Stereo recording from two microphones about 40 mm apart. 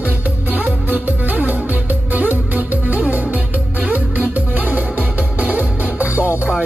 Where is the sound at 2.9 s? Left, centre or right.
Right.